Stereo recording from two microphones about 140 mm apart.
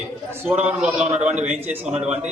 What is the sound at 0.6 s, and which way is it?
A man's voice, 5° right (ahead or behind).